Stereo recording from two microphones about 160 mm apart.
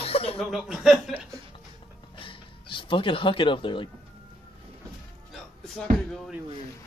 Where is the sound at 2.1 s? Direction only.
30° left (ahead or behind).